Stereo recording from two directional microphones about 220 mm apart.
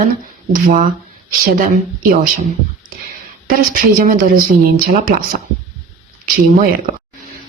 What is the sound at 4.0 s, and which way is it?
Speech, 40° right (ahead or behind).